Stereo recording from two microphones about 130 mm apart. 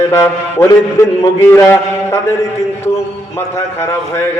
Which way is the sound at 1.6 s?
20° left (ahead or behind).